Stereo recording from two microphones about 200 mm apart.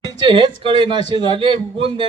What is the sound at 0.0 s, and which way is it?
Speech, 20° right (ahead or behind).